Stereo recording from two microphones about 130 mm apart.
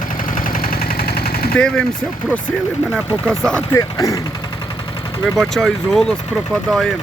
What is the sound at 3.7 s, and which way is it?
Speech, 25° left (ahead or behind).